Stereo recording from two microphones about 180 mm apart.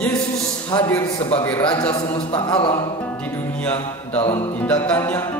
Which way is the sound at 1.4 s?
10° left (ahead or behind).